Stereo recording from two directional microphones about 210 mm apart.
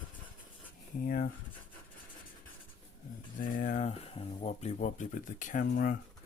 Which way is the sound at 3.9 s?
30° left (ahead or behind).